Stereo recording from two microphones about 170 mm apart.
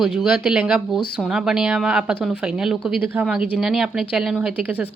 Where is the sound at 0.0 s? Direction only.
Centre (ahead or behind).